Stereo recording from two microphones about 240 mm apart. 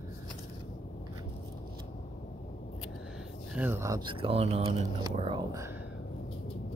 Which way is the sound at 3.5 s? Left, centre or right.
Centre.